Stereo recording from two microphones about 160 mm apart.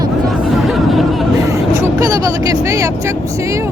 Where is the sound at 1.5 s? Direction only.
20° right (ahead or behind).